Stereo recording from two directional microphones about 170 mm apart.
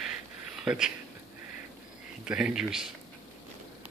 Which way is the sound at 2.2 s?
5° right (ahead or behind).